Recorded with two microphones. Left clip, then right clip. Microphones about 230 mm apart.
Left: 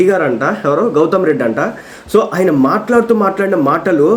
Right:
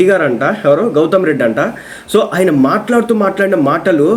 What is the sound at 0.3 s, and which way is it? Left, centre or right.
A man's voice, centre.